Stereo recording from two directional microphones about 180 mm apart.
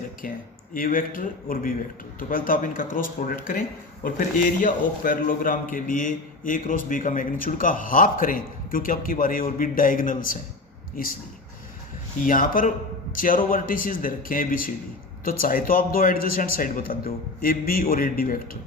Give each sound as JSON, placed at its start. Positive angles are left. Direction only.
{"t": 0.2, "sound": "a man's voice", "side_deg": 50}
{"t": 12.2, "sound": "a man's voice", "side_deg": 50}